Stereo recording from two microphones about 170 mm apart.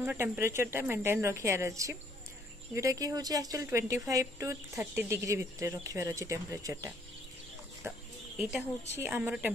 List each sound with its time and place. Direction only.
0.0 s a woman's voice: 10° right (ahead or behind)
8.4 s a woman's voice: 5° right (ahead or behind)